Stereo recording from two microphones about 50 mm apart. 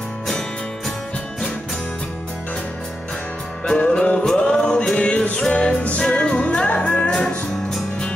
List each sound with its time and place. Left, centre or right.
3.6 s music: centre